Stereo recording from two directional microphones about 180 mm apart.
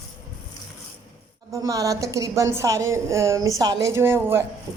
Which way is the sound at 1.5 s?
20° right (ahead or behind).